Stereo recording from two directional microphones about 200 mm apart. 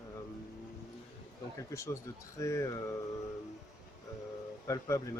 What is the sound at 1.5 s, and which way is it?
Speech, 15° left (ahead or behind).